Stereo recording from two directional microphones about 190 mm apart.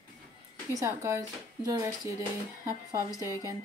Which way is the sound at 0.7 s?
15° right (ahead or behind).